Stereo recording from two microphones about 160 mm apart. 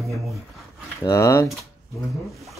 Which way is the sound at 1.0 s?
20° left (ahead or behind).